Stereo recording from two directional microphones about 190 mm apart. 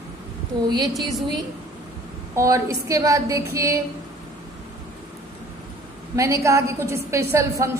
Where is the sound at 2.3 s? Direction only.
15° right (ahead or behind).